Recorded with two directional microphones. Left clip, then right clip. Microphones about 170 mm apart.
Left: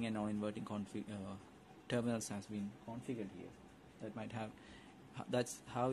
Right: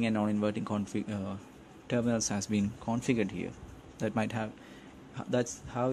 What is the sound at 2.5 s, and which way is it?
Speech, 45° right (ahead or behind).